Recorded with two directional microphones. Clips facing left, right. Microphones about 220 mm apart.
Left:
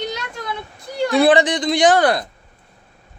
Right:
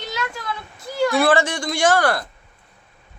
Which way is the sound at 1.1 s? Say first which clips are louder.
Left 5 dB; 20° left (ahead or behind).